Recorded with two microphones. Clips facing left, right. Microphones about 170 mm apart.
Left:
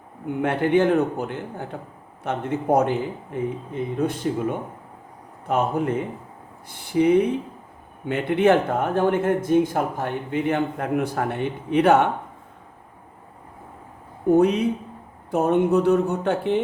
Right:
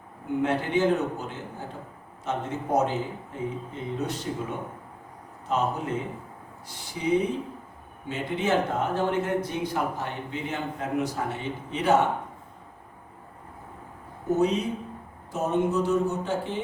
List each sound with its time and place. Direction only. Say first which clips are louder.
0.4 s speech: left 5 dB; 60° left (ahead or behind)
14.3 s speech: left 7 dB; 60° left (ahead or behind)